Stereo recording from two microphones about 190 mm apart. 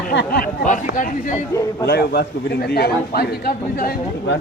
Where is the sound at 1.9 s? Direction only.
55° left (ahead or behind).